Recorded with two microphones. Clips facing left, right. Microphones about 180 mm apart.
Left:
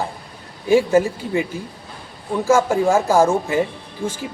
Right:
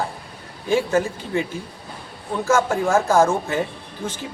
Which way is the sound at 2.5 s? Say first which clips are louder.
Left 3 dB; 15° left (ahead or behind).